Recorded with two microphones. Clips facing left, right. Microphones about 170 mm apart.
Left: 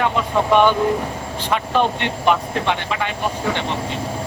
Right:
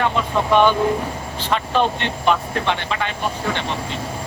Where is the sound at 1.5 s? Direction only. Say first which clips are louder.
Even; 10° left (ahead or behind).